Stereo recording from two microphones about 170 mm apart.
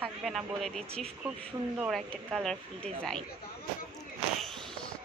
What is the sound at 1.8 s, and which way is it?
Speech, centre (ahead or behind).